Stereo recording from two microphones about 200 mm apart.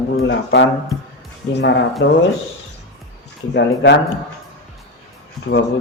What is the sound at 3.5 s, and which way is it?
Speech, 60° left (ahead or behind).